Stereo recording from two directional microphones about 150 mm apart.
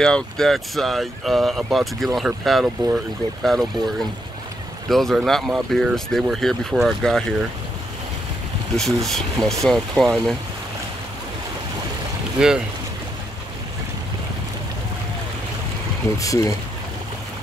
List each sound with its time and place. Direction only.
0.0 s speech: 5° left (ahead or behind)
9.0 s speech: centre (ahead or behind)
12.4 s speech: 5° right (ahead or behind)
16.2 s speech: 20° left (ahead or behind)